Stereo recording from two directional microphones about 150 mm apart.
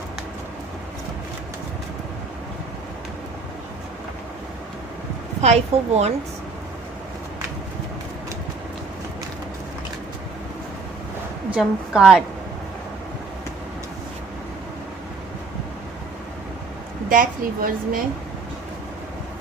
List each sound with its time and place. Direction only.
5.4 s a woman's voice: 45° right (ahead or behind)
11.5 s a woman's voice: 5° right (ahead or behind)
17.1 s a woman's voice: 65° right (ahead or behind)